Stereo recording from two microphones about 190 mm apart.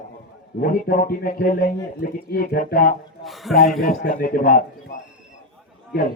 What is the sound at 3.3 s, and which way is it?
Speech, centre (ahead or behind).